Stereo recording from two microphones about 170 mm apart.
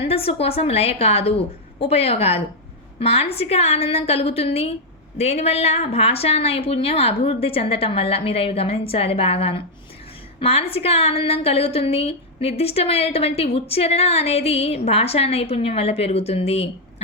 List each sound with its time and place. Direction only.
0.0 s a woman's voice: 35° left (ahead or behind)